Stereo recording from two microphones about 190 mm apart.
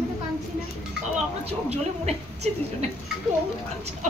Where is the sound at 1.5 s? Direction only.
35° right (ahead or behind).